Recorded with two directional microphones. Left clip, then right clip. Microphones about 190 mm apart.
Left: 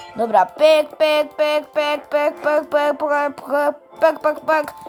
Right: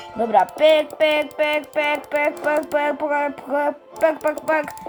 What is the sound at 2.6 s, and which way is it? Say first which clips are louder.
Music: left 3 dB; 20° left (ahead or behind).